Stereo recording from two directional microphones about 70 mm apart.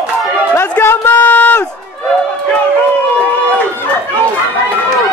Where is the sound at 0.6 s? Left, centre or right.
Left.